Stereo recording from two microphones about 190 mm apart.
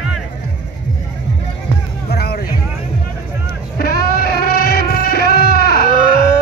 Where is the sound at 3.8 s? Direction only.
55° left (ahead or behind).